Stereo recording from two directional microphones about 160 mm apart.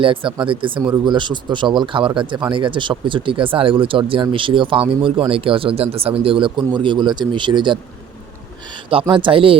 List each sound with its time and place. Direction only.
0.0 s speech: 35° right (ahead or behind)